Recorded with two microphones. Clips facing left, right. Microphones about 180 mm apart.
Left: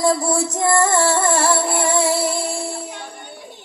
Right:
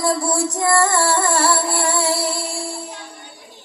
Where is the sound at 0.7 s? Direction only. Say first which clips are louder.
Left 1 dB; 20° left (ahead or behind).